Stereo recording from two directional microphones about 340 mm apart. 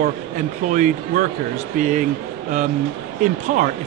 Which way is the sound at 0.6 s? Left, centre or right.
Right.